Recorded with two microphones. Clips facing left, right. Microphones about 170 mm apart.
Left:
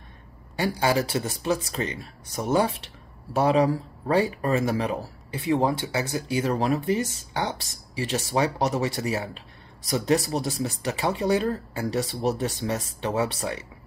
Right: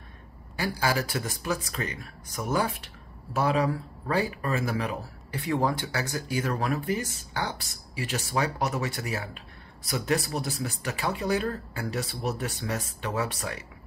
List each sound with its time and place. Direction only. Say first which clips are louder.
0.6 s speech: left 4 dB; 25° left (ahead or behind)